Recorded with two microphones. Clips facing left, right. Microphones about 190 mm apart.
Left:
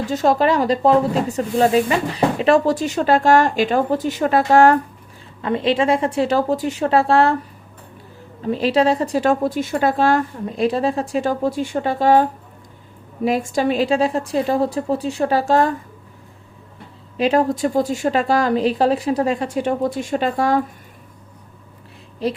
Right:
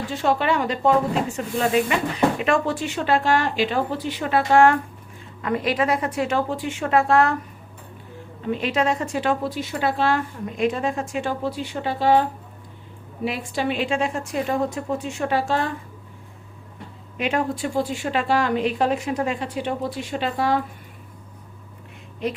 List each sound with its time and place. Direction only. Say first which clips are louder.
0.1 s speech: left 5 dB; 40° left (ahead or behind)
5.4 s speech: left 4 dB; 25° left (ahead or behind)
8.4 s speech: left 6 dB; 35° left (ahead or behind)
13.2 s speech: left 6 dB; 45° left (ahead or behind)
17.2 s speech: left 7 dB; 35° left (ahead or behind)
22.2 s speech: left 4 dB; 35° left (ahead or behind)